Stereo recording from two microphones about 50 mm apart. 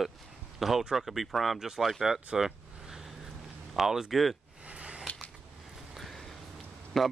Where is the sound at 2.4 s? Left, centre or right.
Centre.